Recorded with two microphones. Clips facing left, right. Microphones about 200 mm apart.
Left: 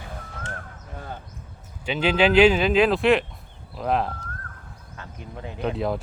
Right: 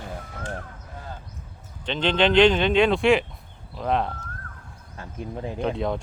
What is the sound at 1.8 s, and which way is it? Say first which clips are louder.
Speech: left 1 dB; 10° left (ahead or behind).